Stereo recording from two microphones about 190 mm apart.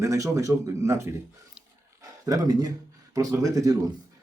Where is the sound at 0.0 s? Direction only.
15° right (ahead or behind).